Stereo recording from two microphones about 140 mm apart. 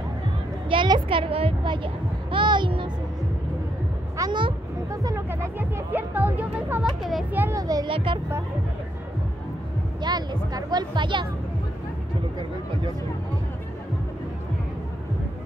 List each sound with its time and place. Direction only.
0.7 s a woman's voice: 35° right (ahead or behind)
4.2 s speech: 35° right (ahead or behind); by 7.2 s centre (ahead or behind)
7.3 s a child's voice: 20° right (ahead or behind)
7.9 s speech: 40° right (ahead or behind)
10.0 s speech: 30° right (ahead or behind)